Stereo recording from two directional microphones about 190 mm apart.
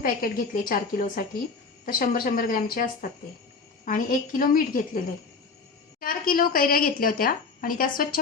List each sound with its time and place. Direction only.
0.0 s a woman's voice: 45° left (ahead or behind)
6.0 s a woman's voice: 50° left (ahead or behind)